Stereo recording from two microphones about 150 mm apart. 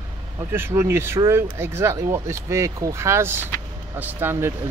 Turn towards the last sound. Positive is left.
turn(degrees=-15)  # may be behind; listen again after turning